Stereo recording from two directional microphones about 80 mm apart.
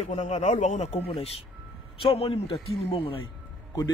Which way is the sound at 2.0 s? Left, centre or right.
Left.